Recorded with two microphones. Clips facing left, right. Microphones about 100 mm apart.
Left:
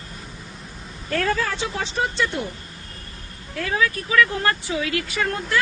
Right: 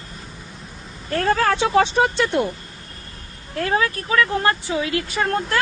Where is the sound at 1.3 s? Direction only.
60° right (ahead or behind); by 2.1 s 75° right (ahead or behind).